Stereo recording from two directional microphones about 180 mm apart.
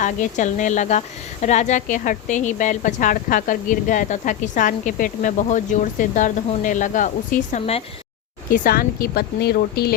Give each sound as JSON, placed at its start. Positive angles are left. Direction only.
{"t": 0.0, "sound": "speech", "side_deg": 45}